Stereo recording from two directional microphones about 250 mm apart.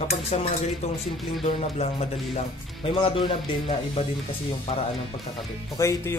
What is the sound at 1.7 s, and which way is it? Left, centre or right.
Speech, left.